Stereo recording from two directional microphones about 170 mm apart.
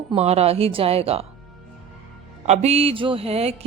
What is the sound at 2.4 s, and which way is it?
A woman's voice, 35° right (ahead or behind).